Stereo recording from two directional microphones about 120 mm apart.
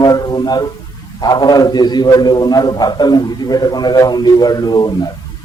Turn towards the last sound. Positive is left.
turn(degrees=35)  # may be behind; listen again after turning